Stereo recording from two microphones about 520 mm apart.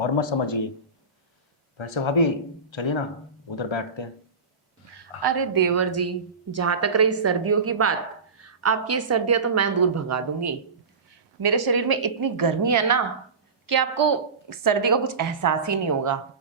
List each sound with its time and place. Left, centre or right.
0.0 s speech: left
1.8 s speech: left
5.2 s a woman's voice: right
11.4 s a woman's voice: right